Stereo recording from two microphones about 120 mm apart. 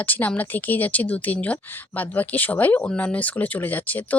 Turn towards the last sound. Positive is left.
turn(degrees=15)  # may be behind; listen again after turning